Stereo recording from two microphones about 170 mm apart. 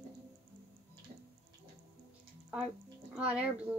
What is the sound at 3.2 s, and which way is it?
Speech, 5° right (ahead or behind).